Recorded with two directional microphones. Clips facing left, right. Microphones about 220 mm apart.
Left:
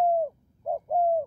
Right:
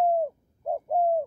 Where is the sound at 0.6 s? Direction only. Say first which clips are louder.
Even; 5° right (ahead or behind).